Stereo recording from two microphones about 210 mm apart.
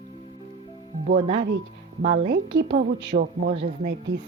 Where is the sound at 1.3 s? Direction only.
60° right (ahead or behind).